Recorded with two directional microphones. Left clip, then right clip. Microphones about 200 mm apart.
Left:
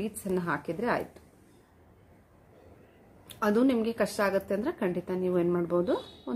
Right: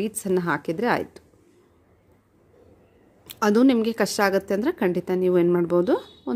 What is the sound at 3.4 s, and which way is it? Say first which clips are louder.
A woman's voice: right 7 dB; 55° right (ahead or behind).